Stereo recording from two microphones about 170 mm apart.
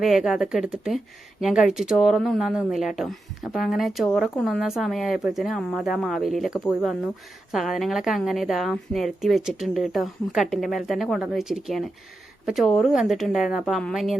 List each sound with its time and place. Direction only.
0.0 s speech: centre (ahead or behind)